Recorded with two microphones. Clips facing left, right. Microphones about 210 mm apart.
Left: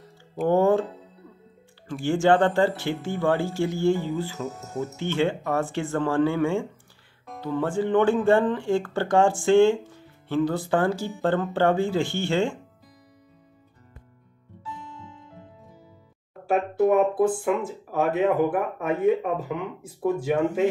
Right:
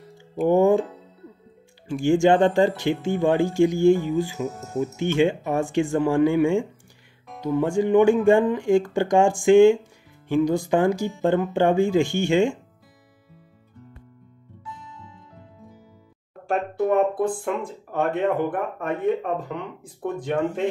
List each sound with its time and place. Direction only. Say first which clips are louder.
0.5 s music: right 2 dB; 15° right (ahead or behind)
1.9 s speech: right 3 dB; 15° right (ahead or behind)
16.4 s a sound: left 2 dB; 5° left (ahead or behind)
17.2 s speech: left 2 dB; 5° left (ahead or behind)